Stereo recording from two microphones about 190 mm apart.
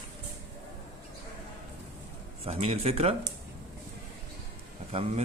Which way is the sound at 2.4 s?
35° right (ahead or behind).